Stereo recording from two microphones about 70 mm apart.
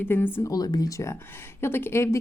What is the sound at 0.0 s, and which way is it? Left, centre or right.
Speech, left.